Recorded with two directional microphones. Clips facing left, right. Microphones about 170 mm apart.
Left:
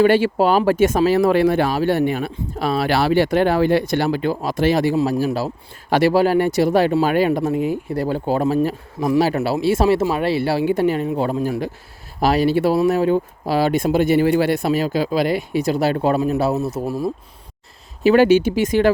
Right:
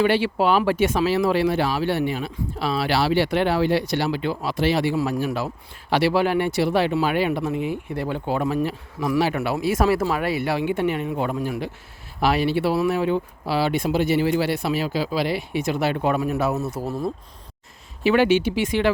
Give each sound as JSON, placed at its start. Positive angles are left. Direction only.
{"t": 0.0, "sound": "speech", "side_deg": 45}
{"t": 5.9, "sound": "speech", "side_deg": 45}
{"t": 16.8, "sound": "speech", "side_deg": 10}
{"t": 18.0, "sound": "speech", "side_deg": 40}